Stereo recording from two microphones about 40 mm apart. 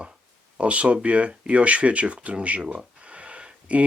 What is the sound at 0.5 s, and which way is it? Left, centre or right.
Speech, right.